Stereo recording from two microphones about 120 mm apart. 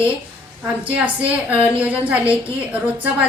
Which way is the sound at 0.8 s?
10° right (ahead or behind).